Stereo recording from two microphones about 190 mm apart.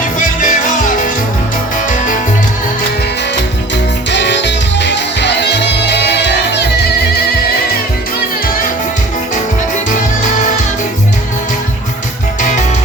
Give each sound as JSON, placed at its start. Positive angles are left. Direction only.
{"t": 0.0, "sound": "music", "side_deg": 45}
{"t": 4.1, "sound": "music", "side_deg": 65}
{"t": 12.4, "sound": "music", "side_deg": 40}